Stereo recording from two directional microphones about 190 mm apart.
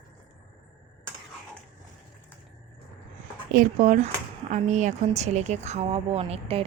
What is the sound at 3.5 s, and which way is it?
A woman's voice, 40° right (ahead or behind).